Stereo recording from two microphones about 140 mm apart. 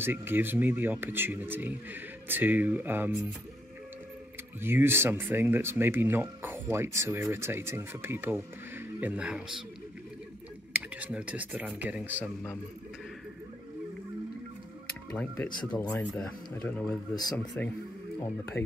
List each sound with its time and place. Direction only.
0.0 s speech: 15° right (ahead or behind)
4.6 s speech: 15° right (ahead or behind)
10.7 s speech: 10° right (ahead or behind)
15.1 s speech: 10° left (ahead or behind)
17.1 s speech: 30° left (ahead or behind)